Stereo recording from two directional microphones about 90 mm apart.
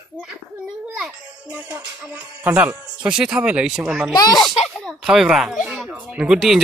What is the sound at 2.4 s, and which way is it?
Speech, 15° right (ahead or behind).